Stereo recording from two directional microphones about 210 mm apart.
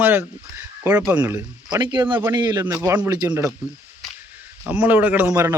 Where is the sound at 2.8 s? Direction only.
5° right (ahead or behind).